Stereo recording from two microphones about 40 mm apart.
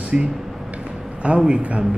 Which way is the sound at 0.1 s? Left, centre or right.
Centre.